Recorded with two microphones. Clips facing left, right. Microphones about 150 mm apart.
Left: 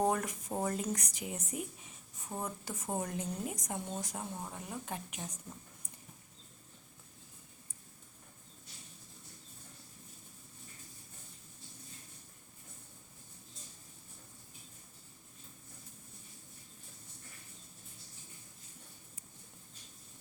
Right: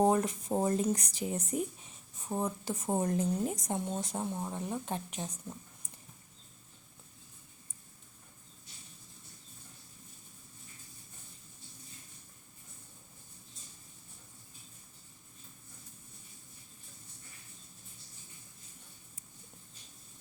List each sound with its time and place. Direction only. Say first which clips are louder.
0.0 s speech: right 5 dB; 25° right (ahead or behind)
2.3 s a woman's voice: right 6 dB; 25° right (ahead or behind)